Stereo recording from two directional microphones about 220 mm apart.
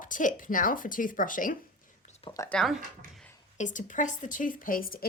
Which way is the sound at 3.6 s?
35° left (ahead or behind).